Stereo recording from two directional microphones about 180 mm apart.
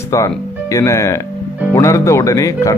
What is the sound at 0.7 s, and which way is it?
Speech, 15° left (ahead or behind).